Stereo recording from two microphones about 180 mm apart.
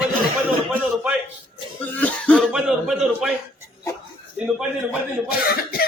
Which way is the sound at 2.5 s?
Centre (ahead or behind).